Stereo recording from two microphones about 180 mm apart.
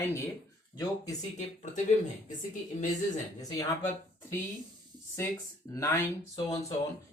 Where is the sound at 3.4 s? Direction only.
15° left (ahead or behind).